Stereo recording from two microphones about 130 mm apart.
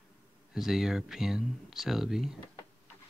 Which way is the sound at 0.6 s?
Centre (ahead or behind).